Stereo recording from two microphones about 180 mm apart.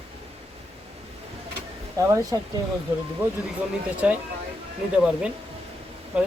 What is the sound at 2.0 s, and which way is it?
Speech, 20° right (ahead or behind).